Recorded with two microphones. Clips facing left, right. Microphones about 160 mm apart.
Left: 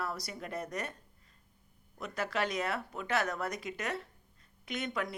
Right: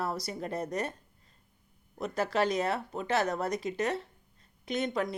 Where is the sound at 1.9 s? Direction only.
35° right (ahead or behind).